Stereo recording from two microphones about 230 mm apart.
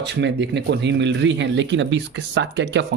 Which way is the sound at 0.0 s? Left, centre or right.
Right.